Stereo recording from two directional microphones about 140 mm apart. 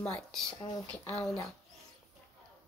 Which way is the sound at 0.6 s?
25° left (ahead or behind).